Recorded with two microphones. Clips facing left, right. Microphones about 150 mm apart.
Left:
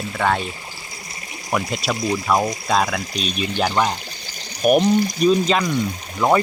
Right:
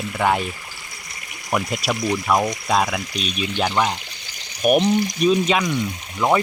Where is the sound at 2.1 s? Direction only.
5° left (ahead or behind).